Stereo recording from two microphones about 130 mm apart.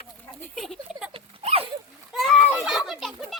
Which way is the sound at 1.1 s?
45° right (ahead or behind).